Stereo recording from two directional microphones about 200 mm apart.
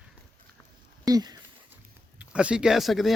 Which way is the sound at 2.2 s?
5° right (ahead or behind).